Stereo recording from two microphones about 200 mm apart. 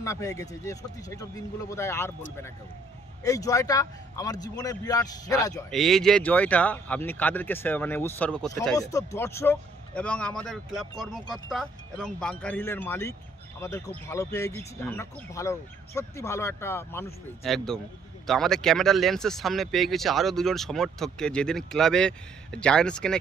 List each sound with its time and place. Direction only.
0.0 s speech: 15° left (ahead or behind)
3.3 s speech: 15° left (ahead or behind)
5.7 s speech: centre (ahead or behind)
17.4 s speech: centre (ahead or behind)